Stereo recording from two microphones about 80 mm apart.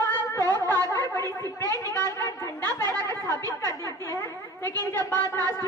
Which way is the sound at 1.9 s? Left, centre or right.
Left.